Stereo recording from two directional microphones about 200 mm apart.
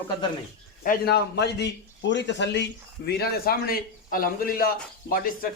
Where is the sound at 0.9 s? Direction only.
55° left (ahead or behind).